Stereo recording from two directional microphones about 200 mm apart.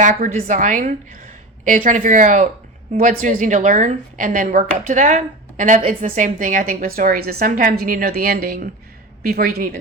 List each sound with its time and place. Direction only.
0.0 s a woman's voice: 40° right (ahead or behind)